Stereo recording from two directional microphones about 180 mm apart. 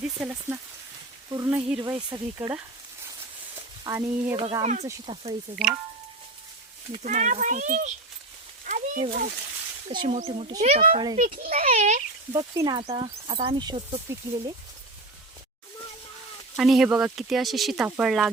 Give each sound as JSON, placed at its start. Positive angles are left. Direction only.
{"t": 0.0, "sound": "rain on surface", "side_deg": -5}
{"t": 1.8, "sound": "speech", "side_deg": -25}
{"t": 3.8, "sound": "rain on surface", "side_deg": -15}
{"t": 4.6, "sound": "speech", "side_deg": -40}
{"t": 5.1, "sound": "speech", "side_deg": -25}
{"t": 6.9, "sound": "speech", "side_deg": -40}
{"t": 8.6, "sound": "a sound", "side_deg": -45}
{"t": 9.9, "sound": "speech", "side_deg": -25}
{"t": 10.6, "sound": "speech", "side_deg": -45}
{"t": 10.9, "sound": "speech", "side_deg": -25}
{"t": 11.3, "sound": "speech", "side_deg": -40}
{"t": 12.3, "sound": "speech", "side_deg": -20}
{"t": 12.9, "sound": "speech", "side_deg": -30}
{"t": 16.6, "sound": "speech", "side_deg": 0}